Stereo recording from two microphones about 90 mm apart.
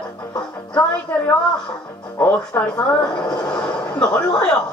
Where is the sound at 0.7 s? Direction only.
15° left (ahead or behind).